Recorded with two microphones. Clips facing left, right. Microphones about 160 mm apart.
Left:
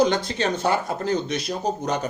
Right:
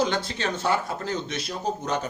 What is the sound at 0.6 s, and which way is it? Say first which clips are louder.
Speech: left 3 dB; 40° left (ahead or behind).